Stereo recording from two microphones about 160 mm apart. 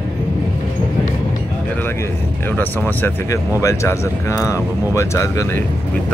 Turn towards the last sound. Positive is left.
turn(degrees=20)  # may be behind; listen again after turning